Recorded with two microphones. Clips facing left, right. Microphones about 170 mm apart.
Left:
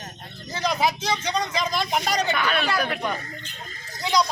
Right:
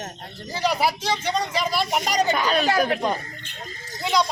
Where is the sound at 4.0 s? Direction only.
Centre (ahead or behind).